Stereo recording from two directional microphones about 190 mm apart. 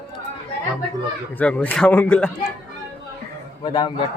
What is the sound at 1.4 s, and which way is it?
Speech, 10° left (ahead or behind).